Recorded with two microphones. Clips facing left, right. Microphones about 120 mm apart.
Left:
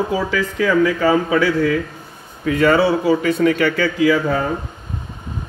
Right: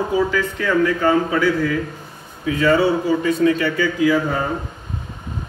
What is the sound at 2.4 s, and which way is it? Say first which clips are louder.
Speech: left 2 dB; 65° left (ahead or behind).